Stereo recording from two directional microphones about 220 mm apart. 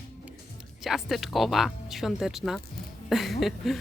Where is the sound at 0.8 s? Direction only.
Centre (ahead or behind).